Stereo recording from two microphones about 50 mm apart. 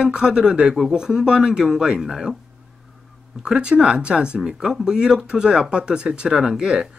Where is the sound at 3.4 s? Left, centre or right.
Centre.